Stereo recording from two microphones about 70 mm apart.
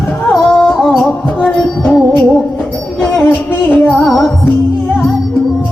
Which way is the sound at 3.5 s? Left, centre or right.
Left.